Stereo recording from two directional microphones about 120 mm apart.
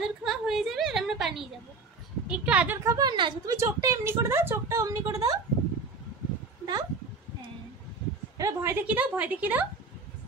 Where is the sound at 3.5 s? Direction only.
25° right (ahead or behind).